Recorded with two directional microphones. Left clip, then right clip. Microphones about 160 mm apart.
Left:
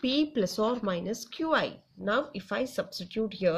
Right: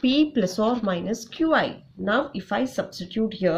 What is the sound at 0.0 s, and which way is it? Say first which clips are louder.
Speech: right 6 dB; 40° left (ahead or behind).